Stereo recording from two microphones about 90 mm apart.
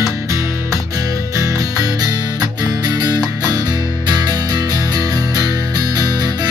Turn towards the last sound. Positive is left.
turn(degrees=-50)  # may be behind; listen again after turning